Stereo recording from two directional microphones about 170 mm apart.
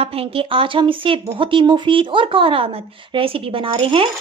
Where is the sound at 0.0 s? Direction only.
35° right (ahead or behind).